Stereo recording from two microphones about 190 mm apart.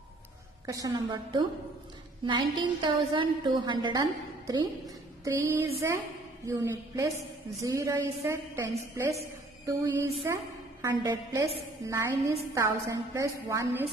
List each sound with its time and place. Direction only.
0.7 s a woman's voice: 20° right (ahead or behind)